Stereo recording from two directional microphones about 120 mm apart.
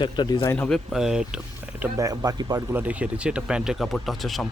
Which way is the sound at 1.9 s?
30° right (ahead or behind).